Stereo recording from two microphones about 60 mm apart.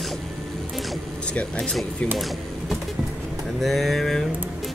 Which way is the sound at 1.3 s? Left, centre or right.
Centre.